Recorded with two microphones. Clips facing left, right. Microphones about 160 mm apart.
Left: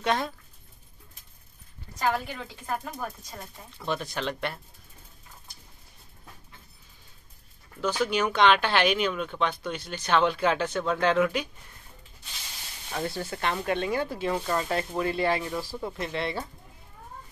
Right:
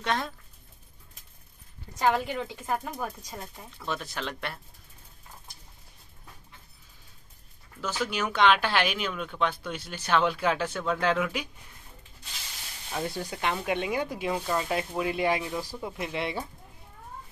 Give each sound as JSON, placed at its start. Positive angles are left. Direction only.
{"t": 0.0, "sound": "speech", "side_deg": 5}
{"t": 2.0, "sound": "speech", "side_deg": -20}
{"t": 3.8, "sound": "speech", "side_deg": 0}
{"t": 7.8, "sound": "speech", "side_deg": -5}
{"t": 12.9, "sound": "speech", "side_deg": -10}